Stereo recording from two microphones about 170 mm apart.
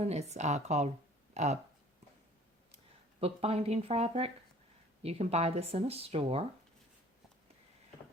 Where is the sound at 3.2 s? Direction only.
35° right (ahead or behind).